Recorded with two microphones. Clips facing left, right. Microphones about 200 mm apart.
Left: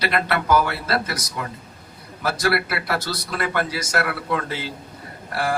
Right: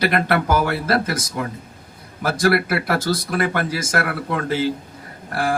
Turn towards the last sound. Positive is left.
turn(degrees=-50)  # may be behind; listen again after turning